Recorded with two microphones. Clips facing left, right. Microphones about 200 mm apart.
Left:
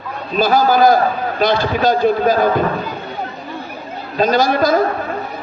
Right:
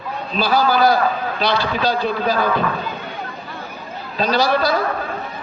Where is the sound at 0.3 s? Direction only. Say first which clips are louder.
Left 4 dB; 45° left (ahead or behind).